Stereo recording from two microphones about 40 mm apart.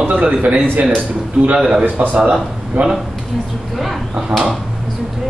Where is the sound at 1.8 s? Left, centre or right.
Right.